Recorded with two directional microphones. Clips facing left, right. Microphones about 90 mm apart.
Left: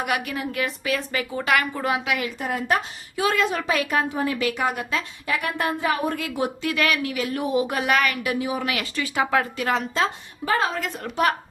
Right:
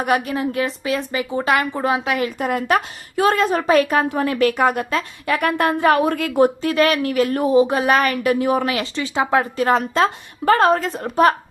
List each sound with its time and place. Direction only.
0.0 s a woman's voice: 35° right (ahead or behind)
2.4 s a woman's voice: 65° right (ahead or behind)
3.2 s speech: 45° right (ahead or behind)
4.1 s a woman's voice: 60° right (ahead or behind)
6.2 s a woman's voice: 45° right (ahead or behind)
7.5 s speech: 30° right (ahead or behind); by 8.6 s 50° right (ahead or behind)
8.6 s speech: 30° right (ahead or behind); by 10.8 s 55° right (ahead or behind)
10.8 s speech: 35° right (ahead or behind)